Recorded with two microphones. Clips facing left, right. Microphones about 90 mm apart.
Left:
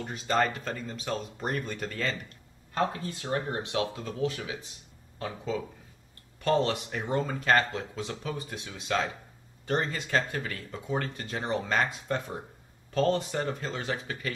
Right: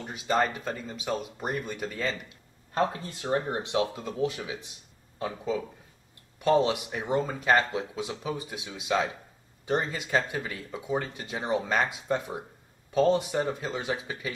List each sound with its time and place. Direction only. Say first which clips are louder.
0.0 s speech: right 1 dB; 10° right (ahead or behind)
2.9 s speech: right 3 dB; 25° right (ahead or behind)